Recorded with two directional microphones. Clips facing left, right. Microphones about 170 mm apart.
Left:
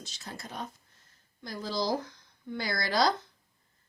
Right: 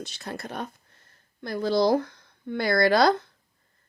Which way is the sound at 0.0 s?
60° right (ahead or behind).